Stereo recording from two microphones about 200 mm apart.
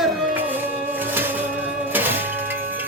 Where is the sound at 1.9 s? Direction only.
10° right (ahead or behind).